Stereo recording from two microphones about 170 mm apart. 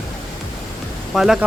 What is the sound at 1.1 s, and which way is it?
Speech, centre (ahead or behind).